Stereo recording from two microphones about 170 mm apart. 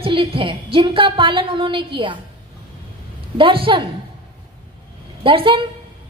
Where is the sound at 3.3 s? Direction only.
30° right (ahead or behind).